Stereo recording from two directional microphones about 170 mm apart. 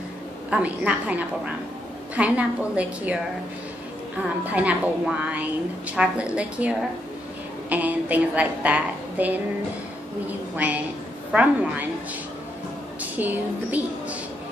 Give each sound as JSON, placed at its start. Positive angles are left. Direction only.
{"t": 0.5, "sound": "a woman's voice", "side_deg": -5}
{"t": 4.5, "sound": "a woman's voice", "side_deg": -10}
{"t": 10.5, "sound": "a woman's voice", "side_deg": -10}
{"t": 13.0, "sound": "a woman's voice", "side_deg": -10}